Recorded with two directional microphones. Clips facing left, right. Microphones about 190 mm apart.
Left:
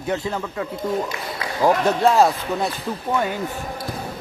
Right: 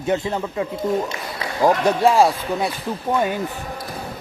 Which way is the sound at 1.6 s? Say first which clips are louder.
Right 1 dB; 15° right (ahead or behind).